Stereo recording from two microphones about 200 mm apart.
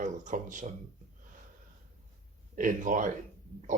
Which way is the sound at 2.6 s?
40° right (ahead or behind).